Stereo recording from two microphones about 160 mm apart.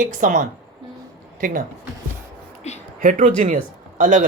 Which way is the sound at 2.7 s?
40° left (ahead or behind).